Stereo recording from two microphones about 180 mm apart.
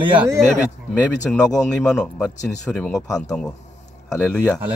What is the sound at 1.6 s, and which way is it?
Speech, 5° left (ahead or behind).